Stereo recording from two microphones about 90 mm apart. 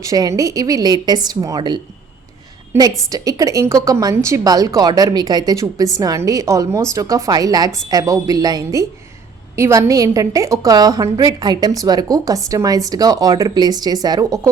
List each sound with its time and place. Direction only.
0.0 s a woman's voice: 40° right (ahead or behind)
2.7 s a woman's voice: 30° right (ahead or behind)
3.1 s a woman's voice: 40° right (ahead or behind)
9.6 s a woman's voice: 30° right (ahead or behind)